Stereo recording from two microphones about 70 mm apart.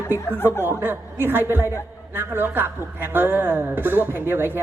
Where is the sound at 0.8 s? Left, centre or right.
Right.